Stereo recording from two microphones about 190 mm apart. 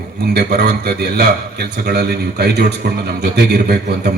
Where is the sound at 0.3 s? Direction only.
55° right (ahead or behind).